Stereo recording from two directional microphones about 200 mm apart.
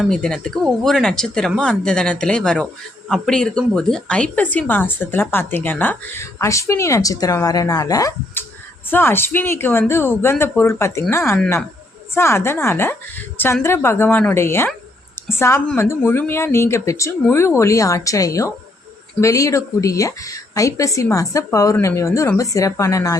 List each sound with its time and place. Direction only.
0.0 s speech: 5° left (ahead or behind)